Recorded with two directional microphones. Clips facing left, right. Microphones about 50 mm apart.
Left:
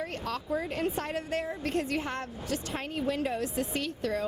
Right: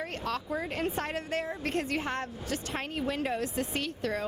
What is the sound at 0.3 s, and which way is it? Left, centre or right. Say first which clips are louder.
Speech: even; right.